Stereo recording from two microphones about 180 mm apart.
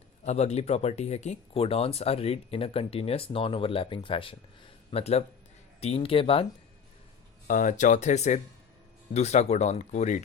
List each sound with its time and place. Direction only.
0.3 s speech: 35° left (ahead or behind)
7.4 s speech: 45° left (ahead or behind)